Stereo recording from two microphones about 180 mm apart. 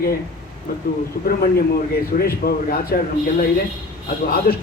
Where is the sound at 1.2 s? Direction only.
55° left (ahead or behind).